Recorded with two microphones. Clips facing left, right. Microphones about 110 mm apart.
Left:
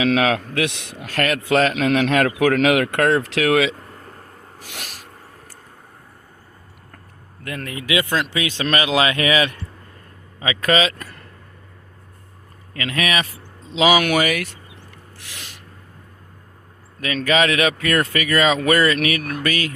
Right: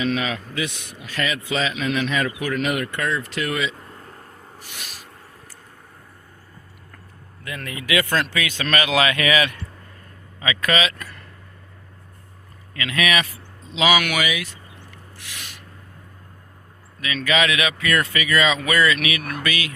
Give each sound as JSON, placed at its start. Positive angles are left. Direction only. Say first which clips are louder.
{"t": 0.0, "sound": "speech", "louder": "left 6 dB", "side_deg": 75}
{"t": 1.0, "sound": "speech", "louder": "left 5 dB", "side_deg": 60}
{"t": 4.6, "sound": "speech", "louder": "left 5 dB", "side_deg": 70}
{"t": 7.6, "sound": "speech", "louder": "left 1 dB", "side_deg": 35}
{"t": 8.1, "sound": "speech", "louder": "left 1 dB", "side_deg": 20}
{"t": 12.7, "sound": "a man's voice", "louder": "even", "side_deg": 35}
{"t": 14.2, "sound": "speech", "louder": "left 4 dB", "side_deg": 55}
{"t": 15.2, "sound": "gasp", "louder": "even", "side_deg": 30}
{"t": 17.0, "sound": "speech", "louder": "left 3 dB", "side_deg": 40}